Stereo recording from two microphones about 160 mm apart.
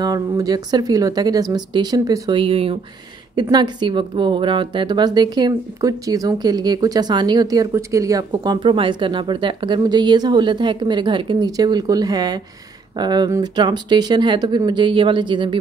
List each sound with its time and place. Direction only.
0.0 s speech: 25° right (ahead or behind)